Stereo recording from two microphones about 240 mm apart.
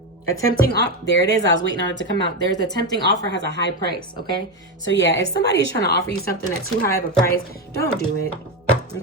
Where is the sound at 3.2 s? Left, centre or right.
Left.